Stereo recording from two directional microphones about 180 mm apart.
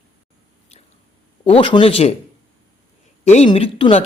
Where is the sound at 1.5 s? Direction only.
30° left (ahead or behind).